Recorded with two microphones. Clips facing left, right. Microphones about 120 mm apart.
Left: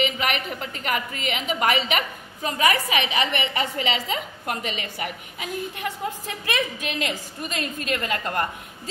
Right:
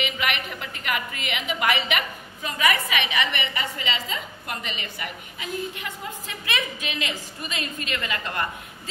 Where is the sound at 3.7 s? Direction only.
65° left (ahead or behind).